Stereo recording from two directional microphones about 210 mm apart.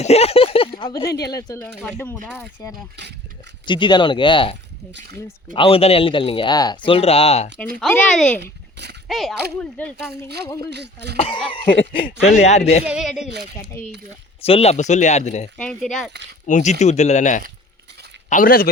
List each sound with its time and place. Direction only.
0.0 s speech: 30° left (ahead or behind); by 2.1 s 10° left (ahead or behind)
3.7 s speech: 20° left (ahead or behind)
5.5 s speech: 25° left (ahead or behind)
7.8 s speech: centre (ahead or behind)
8.4 s speech: 50° right (ahead or behind)
9.0 s speech: centre (ahead or behind)
10.7 s speech: 55° right (ahead or behind)
11.2 s speech: 25° left (ahead or behind)
12.8 s speech: 5° right (ahead or behind)
14.4 s speech: 30° left (ahead or behind)
15.5 s speech: centre (ahead or behind)
16.5 s speech: 35° left (ahead or behind)